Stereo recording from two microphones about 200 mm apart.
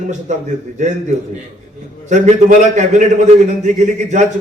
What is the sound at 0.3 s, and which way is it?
Speech, 35° right (ahead or behind).